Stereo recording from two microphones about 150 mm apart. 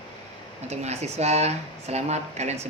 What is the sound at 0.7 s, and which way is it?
Speech, 45° right (ahead or behind).